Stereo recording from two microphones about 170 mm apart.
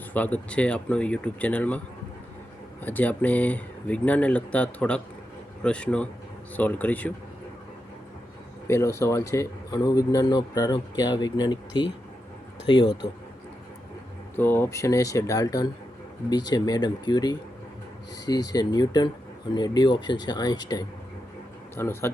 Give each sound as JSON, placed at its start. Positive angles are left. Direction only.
{"t": 0.1, "sound": "speech", "side_deg": 10}
{"t": 2.8, "sound": "speech", "side_deg": 10}
{"t": 8.6, "sound": "speech", "side_deg": 15}
{"t": 14.3, "sound": "speech", "side_deg": 10}